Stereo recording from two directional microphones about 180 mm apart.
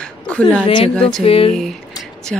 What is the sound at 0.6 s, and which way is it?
Speech, 30° left (ahead or behind).